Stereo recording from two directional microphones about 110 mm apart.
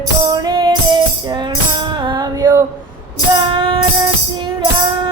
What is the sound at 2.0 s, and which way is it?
Music, 40° right (ahead or behind).